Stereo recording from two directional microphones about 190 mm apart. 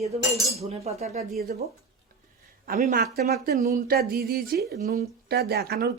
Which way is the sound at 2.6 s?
50° right (ahead or behind).